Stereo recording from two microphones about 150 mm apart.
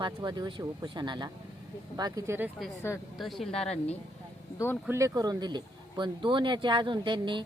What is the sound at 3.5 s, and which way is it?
Speech, 40° left (ahead or behind).